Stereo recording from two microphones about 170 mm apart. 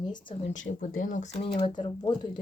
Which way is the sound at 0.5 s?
50° left (ahead or behind).